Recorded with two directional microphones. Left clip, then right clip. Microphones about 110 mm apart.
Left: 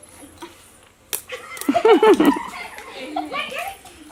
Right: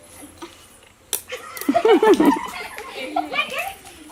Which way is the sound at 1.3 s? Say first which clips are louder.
Even; 15° left (ahead or behind).